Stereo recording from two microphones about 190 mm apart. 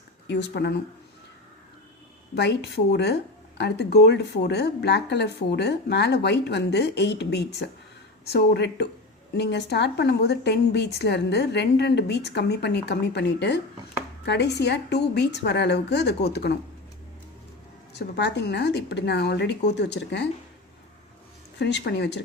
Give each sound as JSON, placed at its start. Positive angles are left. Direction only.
{"t": 0.3, "sound": "a woman's voice", "side_deg": 65}
{"t": 2.3, "sound": "a woman's voice", "side_deg": 60}
{"t": 17.9, "sound": "a woman's voice", "side_deg": 60}
{"t": 21.6, "sound": "a woman's voice", "side_deg": 65}